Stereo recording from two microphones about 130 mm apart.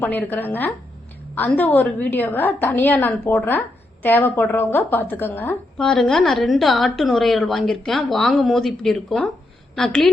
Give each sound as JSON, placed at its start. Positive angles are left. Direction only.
{"t": 0.0, "sound": "a woman's voice", "side_deg": 15}
{"t": 5.7, "sound": "a woman's voice", "side_deg": 5}